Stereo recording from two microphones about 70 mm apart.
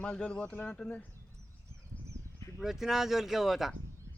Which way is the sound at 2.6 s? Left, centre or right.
Centre.